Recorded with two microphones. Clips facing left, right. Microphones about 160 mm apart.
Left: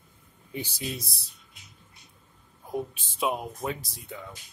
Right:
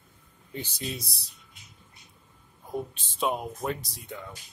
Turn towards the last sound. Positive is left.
turn(degrees=0)  # may be behind; listen again after turning